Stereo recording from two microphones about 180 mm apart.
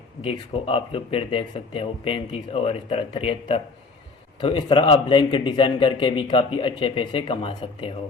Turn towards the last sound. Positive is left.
turn(degrees=30)  # may be behind; listen again after turning